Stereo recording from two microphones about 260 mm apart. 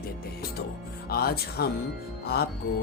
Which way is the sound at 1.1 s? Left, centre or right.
Left.